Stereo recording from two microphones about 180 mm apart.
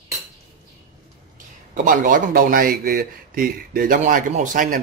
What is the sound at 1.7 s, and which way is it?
A man's voice, 45° right (ahead or behind).